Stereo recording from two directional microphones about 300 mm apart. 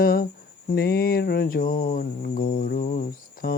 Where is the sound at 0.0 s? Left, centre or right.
Left.